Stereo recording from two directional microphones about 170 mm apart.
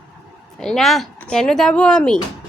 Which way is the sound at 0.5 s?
5° left (ahead or behind).